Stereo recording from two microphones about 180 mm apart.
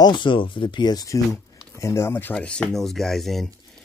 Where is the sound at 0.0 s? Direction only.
25° left (ahead or behind).